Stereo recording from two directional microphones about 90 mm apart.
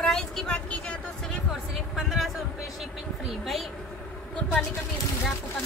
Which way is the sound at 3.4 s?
Centre (ahead or behind).